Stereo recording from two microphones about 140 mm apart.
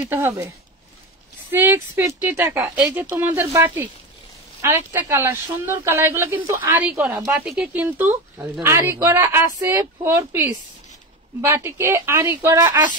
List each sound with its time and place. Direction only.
0.1 s a woman's voice: 20° right (ahead or behind)
1.5 s a woman's voice: 15° right (ahead or behind)
11.4 s a woman's voice: 20° right (ahead or behind)